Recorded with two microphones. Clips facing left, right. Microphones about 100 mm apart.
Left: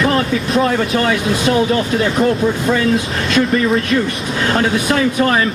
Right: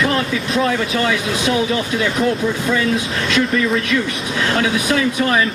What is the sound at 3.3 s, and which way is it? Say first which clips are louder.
Speech: left 3 dB; 40° left (ahead or behind).